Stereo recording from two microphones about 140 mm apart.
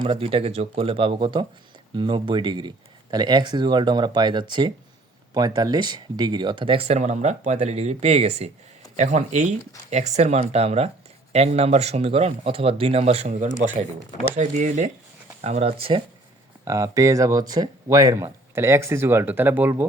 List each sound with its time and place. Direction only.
0.0 s speech: 40° right (ahead or behind)
9.0 s speech: 60° right (ahead or behind)
14.2 s speech: 65° right (ahead or behind); by 16.0 s 40° right (ahead or behind)
16.6 s speech: 25° right (ahead or behind)